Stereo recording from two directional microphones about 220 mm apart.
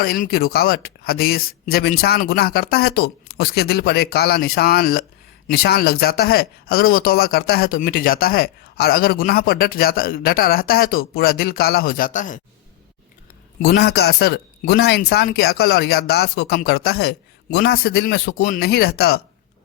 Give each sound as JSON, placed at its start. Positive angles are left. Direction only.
{"t": 0.0, "sound": "speech", "side_deg": 45}
{"t": 13.6, "sound": "speech", "side_deg": 45}